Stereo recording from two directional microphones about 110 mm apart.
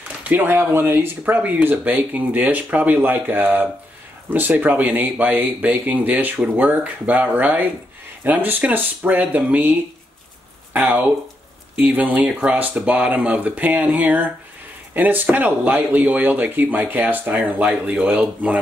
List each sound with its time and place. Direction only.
0.2 s speech: 15° right (ahead or behind)